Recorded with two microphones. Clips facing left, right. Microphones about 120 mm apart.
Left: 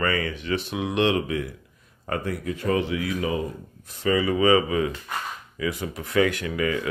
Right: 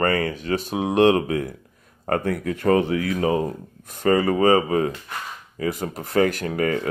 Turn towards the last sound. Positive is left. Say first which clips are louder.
# right 3 dB
turn(degrees=-45)  # may be behind; listen again after turning